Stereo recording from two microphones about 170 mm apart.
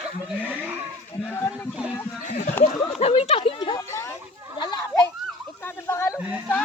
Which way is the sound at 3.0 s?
35° left (ahead or behind).